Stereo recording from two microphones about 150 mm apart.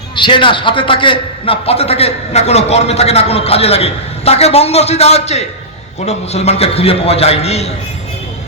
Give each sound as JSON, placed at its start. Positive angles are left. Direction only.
{"t": 0.2, "sound": "a man's voice", "side_deg": 35}